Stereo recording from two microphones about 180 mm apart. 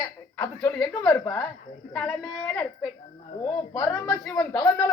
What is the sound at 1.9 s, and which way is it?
A woman's voice, centre (ahead or behind).